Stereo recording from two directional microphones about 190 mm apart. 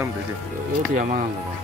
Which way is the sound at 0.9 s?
40° right (ahead or behind).